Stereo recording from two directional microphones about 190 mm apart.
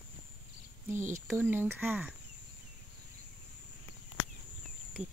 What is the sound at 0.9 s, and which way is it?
Speech, 15° right (ahead or behind).